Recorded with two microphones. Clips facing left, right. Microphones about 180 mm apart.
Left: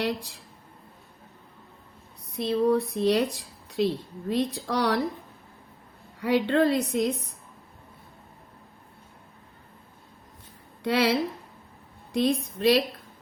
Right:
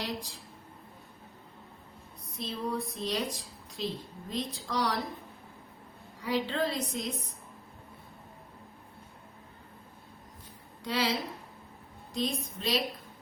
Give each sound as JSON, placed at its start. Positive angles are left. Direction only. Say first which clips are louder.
{"t": 0.0, "sound": "speech", "louder": "left 8 dB", "side_deg": 65}
{"t": 2.3, "sound": "speech", "louder": "left 12 dB", "side_deg": 65}
{"t": 6.1, "sound": "speech", "louder": "left 8 dB", "side_deg": 65}
{"t": 10.8, "sound": "speech", "louder": "left 8 dB", "side_deg": 65}